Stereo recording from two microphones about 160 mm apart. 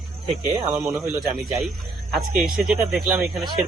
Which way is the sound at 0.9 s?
Centre (ahead or behind).